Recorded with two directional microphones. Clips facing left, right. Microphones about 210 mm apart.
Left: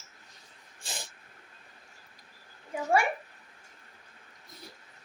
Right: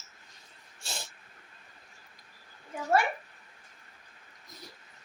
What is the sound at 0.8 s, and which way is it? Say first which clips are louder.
Dog: right 1 dB; 15° left (ahead or behind).